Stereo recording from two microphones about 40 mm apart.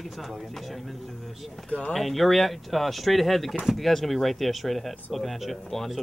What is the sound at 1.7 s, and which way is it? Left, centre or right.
Speech, left.